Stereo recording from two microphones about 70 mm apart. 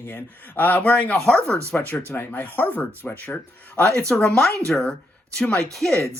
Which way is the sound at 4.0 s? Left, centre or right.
Centre.